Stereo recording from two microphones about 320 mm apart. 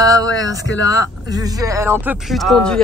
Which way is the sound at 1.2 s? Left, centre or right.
Centre.